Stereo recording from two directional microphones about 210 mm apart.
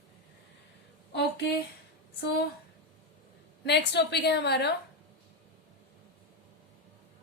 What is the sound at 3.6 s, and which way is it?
A woman's voice, 55° left (ahead or behind).